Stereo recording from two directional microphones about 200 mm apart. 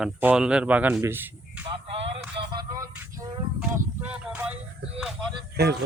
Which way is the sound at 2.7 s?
15° right (ahead or behind).